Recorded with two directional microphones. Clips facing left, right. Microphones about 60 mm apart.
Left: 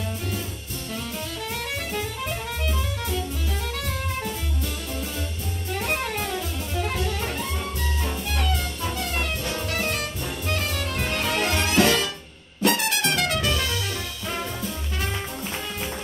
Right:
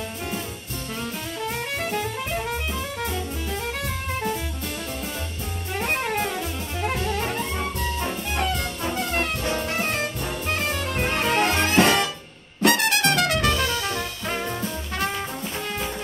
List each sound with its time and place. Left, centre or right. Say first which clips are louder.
1.9 s music: right 2 dB; right
5.7 s music: right 2 dB; right
8.3 s jazz: right 3 dB; right
10.5 s music: right 2 dB; right
12.6 s music: right 3 dB; right